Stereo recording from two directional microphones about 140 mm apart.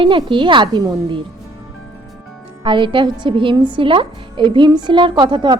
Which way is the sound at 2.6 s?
35° right (ahead or behind).